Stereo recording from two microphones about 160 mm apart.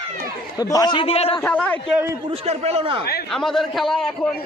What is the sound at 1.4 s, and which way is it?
Speech, 10° left (ahead or behind).